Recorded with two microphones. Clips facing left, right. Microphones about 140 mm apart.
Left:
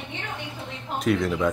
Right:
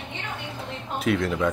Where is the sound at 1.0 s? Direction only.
Centre (ahead or behind).